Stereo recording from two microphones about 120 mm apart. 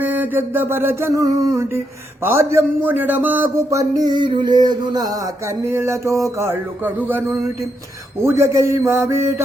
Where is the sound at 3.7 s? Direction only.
30° right (ahead or behind).